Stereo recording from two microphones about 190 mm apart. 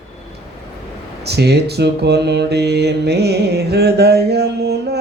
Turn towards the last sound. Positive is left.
turn(degrees=-60)  # may be behind; listen again after turning